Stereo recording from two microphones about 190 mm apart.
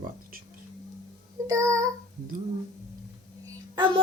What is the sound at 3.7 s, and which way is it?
Speech, 25° right (ahead or behind).